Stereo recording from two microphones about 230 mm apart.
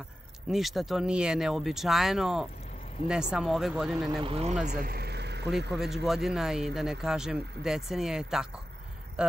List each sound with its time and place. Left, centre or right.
0.5 s speech: centre
4.2 s speech: right
4.6 s vehicle: right
6.0 s speech: centre